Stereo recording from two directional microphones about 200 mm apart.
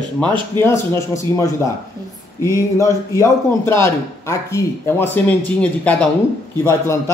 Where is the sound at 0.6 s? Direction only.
15° left (ahead or behind).